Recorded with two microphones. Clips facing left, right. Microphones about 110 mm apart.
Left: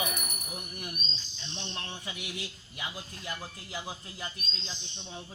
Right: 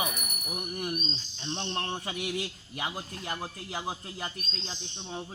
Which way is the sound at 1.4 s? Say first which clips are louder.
Right 8 dB; 50° right (ahead or behind).